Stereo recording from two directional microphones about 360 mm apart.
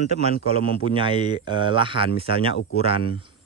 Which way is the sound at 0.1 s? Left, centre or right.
Centre.